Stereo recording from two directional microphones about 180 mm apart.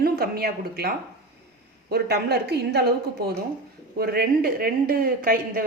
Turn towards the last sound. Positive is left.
turn(degrees=-55)  # may be behind; listen again after turning